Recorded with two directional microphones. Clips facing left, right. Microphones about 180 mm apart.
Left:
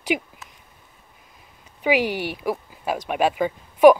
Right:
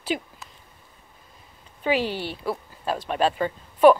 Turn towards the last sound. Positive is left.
turn(degrees=10)  # may be behind; listen again after turning